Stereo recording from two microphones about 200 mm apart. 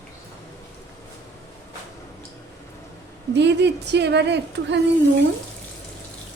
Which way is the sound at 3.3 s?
60° right (ahead or behind).